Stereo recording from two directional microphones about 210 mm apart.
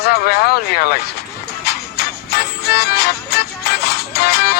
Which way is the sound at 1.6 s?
50° left (ahead or behind).